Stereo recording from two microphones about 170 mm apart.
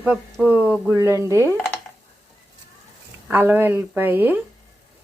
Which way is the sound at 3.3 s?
10° right (ahead or behind).